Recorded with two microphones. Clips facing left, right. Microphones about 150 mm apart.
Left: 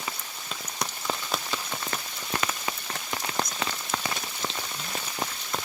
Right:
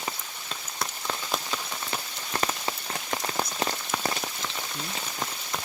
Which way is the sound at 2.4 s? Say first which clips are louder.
Right 4 dB; 25° right (ahead or behind).